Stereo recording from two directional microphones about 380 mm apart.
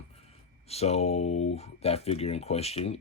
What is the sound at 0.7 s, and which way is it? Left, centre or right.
Speech, centre.